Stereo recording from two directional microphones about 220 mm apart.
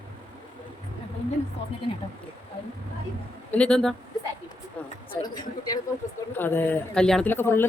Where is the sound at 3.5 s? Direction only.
5° left (ahead or behind).